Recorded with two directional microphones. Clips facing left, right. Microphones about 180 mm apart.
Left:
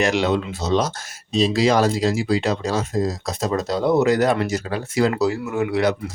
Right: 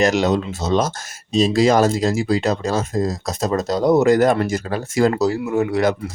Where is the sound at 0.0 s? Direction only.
45° right (ahead or behind).